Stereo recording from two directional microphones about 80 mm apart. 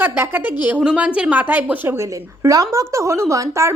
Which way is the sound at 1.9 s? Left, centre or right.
Right.